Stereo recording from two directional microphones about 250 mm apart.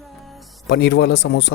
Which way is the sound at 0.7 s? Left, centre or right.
Left.